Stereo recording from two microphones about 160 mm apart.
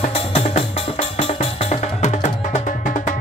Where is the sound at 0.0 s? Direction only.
35° left (ahead or behind).